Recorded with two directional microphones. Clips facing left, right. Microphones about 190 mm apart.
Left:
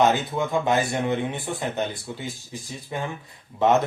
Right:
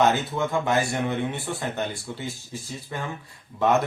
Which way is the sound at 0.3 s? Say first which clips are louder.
Left 1 dB; 20° left (ahead or behind).